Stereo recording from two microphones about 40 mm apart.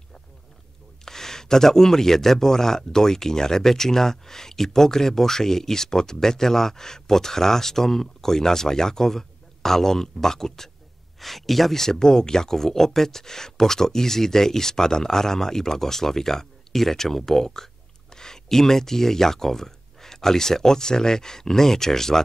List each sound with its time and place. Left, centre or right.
1.0 s speech: centre